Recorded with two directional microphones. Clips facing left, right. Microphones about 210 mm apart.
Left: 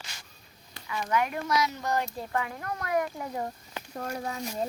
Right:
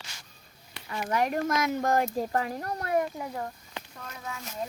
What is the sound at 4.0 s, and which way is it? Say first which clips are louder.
Speech: left 10 dB; 45° left (ahead or behind).